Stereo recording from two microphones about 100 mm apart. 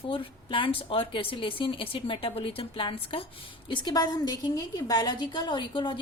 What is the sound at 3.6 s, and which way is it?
A woman's voice, 50° left (ahead or behind).